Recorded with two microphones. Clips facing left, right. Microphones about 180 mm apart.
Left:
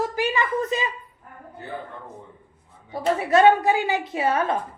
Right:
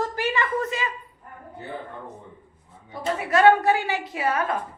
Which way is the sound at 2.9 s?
20° left (ahead or behind).